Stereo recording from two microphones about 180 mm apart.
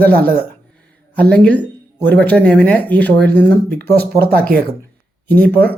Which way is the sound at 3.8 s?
60° right (ahead or behind).